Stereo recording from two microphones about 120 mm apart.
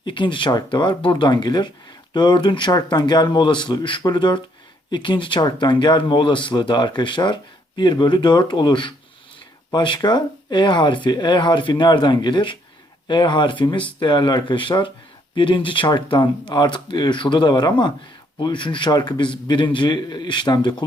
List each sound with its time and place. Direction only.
0.0 s speech: 40° left (ahead or behind)